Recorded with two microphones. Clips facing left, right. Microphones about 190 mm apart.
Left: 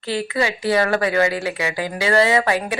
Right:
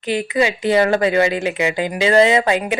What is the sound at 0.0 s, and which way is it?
Speech, 20° right (ahead or behind).